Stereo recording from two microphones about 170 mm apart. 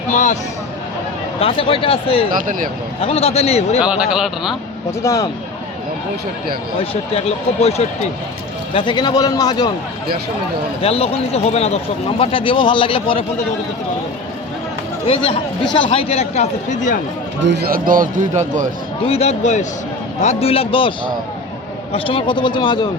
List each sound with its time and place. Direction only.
0.1 s speech: 45° left (ahead or behind)
1.4 s speech: 35° left (ahead or behind)
2.3 s speech: 55° right (ahead or behind)
3.0 s speech: 35° left (ahead or behind)
3.8 s speech: 5° right (ahead or behind)
4.9 s speech: 20° left (ahead or behind)
6.9 s speech: 35° left (ahead or behind)
8.7 s a man's voice: 30° left (ahead or behind)
10.8 s speech: 35° left (ahead or behind)
15.0 s speech: 35° left (ahead or behind)
17.4 s a man's voice: 80° right; by 18.7 s 45° right (ahead or behind)
19.0 s a man's voice: 35° left (ahead or behind)